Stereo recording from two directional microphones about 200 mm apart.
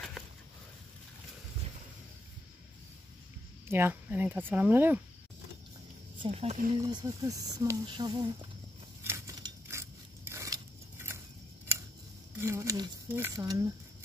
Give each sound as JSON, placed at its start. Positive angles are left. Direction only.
{"t": 3.6, "sound": "speech", "side_deg": -10}
{"t": 6.2, "sound": "speech", "side_deg": -30}
{"t": 6.8, "sound": "speech", "side_deg": -20}
{"t": 9.0, "sound": "scissors", "side_deg": -15}
{"t": 12.4, "sound": "speech", "side_deg": -15}